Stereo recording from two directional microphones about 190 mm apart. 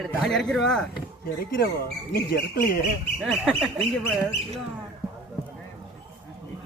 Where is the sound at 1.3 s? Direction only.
55° left (ahead or behind).